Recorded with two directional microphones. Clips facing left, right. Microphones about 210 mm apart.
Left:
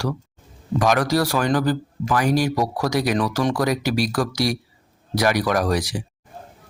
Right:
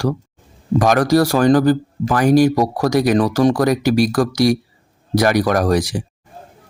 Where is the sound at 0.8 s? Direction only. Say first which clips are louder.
Right 5 dB; 45° right (ahead or behind).